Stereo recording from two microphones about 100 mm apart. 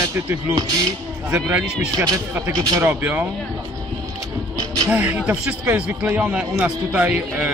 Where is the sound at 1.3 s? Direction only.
20° right (ahead or behind).